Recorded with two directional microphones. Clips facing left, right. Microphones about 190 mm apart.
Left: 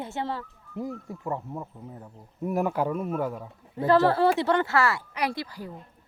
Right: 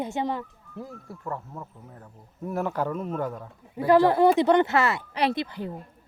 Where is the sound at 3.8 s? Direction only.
15° right (ahead or behind).